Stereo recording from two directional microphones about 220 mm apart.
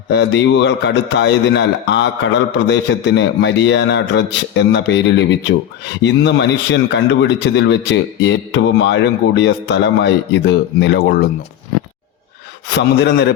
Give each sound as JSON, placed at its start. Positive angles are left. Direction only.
{"t": 0.1, "sound": "a man's voice", "side_deg": 55}
{"t": 12.6, "sound": "a man's voice", "side_deg": 50}